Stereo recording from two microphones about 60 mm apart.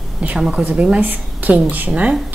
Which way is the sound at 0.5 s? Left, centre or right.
Right.